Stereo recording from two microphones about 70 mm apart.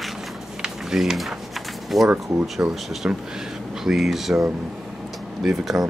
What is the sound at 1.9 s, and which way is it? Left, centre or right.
Speech, centre.